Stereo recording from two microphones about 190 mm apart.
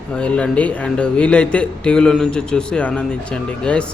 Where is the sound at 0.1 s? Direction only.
5° left (ahead or behind).